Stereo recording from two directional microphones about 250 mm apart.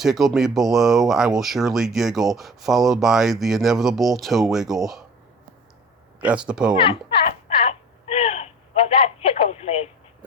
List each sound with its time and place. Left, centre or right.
0.0 s speech: centre
6.1 s speech: centre
6.7 s a sound: left
9.0 s telephone: left